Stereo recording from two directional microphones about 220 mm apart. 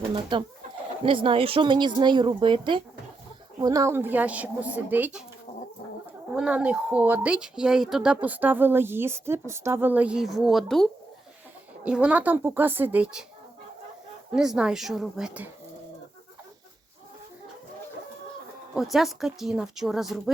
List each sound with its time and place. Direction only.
0.0 s a woman's voice: 20° right (ahead or behind)
5.5 s chicken: 35° left (ahead or behind)
6.3 s a woman's voice: 5° right (ahead or behind)
14.3 s a woman's voice: 5° right (ahead or behind)
18.7 s a woman's voice: centre (ahead or behind)